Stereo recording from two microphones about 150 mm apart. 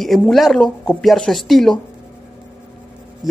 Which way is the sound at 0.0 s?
Centre (ahead or behind).